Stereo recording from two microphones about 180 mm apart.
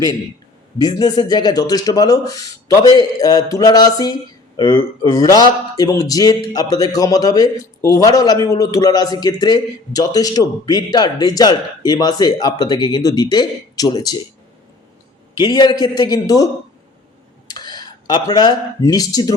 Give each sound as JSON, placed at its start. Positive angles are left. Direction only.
{"t": 0.8, "sound": "a man's voice", "side_deg": 20}
{"t": 15.4, "sound": "a man's voice", "side_deg": 25}
{"t": 17.5, "sound": "speech", "side_deg": 20}